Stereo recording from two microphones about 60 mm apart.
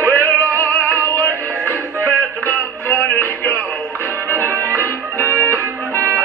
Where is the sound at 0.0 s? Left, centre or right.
Left.